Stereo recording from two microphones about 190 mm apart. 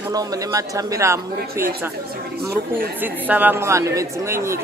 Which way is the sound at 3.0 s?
10° right (ahead or behind).